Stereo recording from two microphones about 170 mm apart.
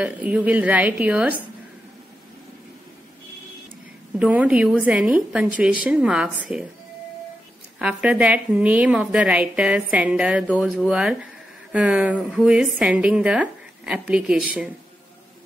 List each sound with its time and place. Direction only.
0.0 s a woman's voice: 5° right (ahead or behind)
4.2 s a woman's voice: 5° right (ahead or behind)
7.8 s a woman's voice: 5° right (ahead or behind)